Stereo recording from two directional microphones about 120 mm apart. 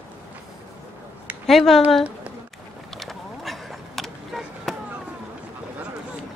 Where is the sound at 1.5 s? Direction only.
Centre (ahead or behind).